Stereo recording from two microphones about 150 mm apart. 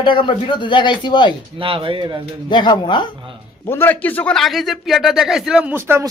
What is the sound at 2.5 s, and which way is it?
Speech, 30° left (ahead or behind).